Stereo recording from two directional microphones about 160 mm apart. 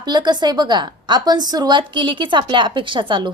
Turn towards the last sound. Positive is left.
turn(degrees=-30)  # may be behind; listen again after turning